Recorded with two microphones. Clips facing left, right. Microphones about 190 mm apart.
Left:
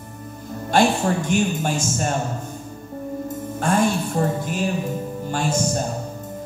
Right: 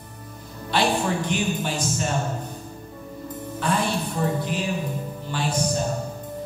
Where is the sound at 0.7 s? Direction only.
45° left (ahead or behind).